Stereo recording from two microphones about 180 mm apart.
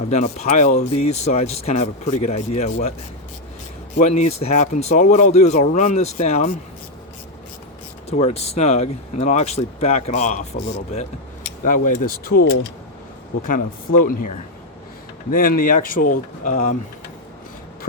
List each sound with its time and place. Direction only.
0.1 s speech: 35° left (ahead or behind)
3.9 s speech: 40° left (ahead or behind)
8.2 s speech: 35° left (ahead or behind)
13.5 s speech: 50° left (ahead or behind)
15.3 s speech: 50° left (ahead or behind)